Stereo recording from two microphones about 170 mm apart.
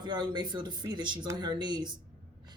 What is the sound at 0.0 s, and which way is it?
Speech, 25° right (ahead or behind).